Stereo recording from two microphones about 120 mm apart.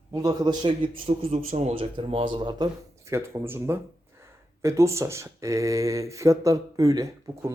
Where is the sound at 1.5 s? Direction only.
65° right (ahead or behind); by 2.7 s 40° right (ahead or behind).